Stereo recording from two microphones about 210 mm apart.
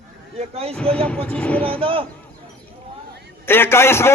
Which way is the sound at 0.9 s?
5° left (ahead or behind).